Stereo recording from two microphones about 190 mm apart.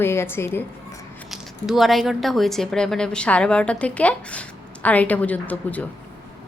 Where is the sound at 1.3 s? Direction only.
Centre (ahead or behind).